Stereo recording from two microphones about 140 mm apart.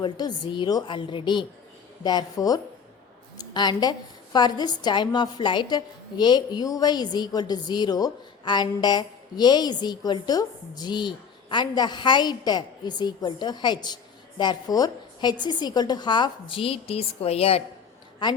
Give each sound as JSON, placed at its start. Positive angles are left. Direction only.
{"t": 0.0, "sound": "a woman's voice", "side_deg": 30}